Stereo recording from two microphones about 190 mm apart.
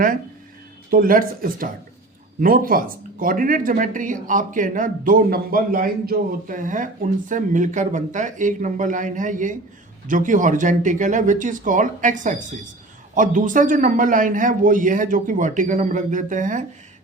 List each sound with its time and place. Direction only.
0.9 s speech: 50° right (ahead or behind)